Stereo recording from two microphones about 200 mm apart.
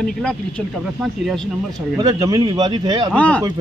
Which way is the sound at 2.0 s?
20° right (ahead or behind).